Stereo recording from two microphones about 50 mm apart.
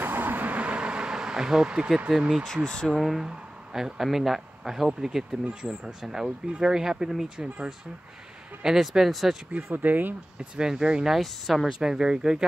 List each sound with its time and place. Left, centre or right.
0.0 s vehicle: right; by 2.0 s centre
2.0 s speech: centre
2.4 s speech: centre
2.9 s speech: centre
7.4 s speech: right
8.6 s speech: centre
9.8 s speech: right
10.5 s speech: centre
11.1 s speech: centre